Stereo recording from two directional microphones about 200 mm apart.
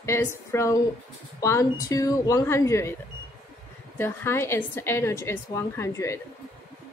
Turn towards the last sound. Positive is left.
turn(degrees=15)  # may be behind; listen again after turning